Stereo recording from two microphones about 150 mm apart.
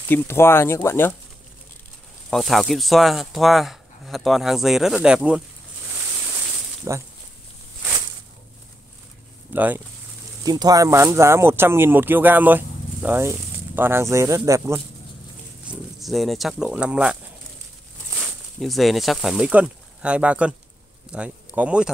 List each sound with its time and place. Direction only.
0.1 s speech: 15° left (ahead or behind)
2.3 s speech: centre (ahead or behind)
6.9 s speech: 20° right (ahead or behind)
9.5 s speech: 10° right (ahead or behind)
10.4 s speech: 25° right (ahead or behind)
15.6 s speech: 5° right (ahead or behind)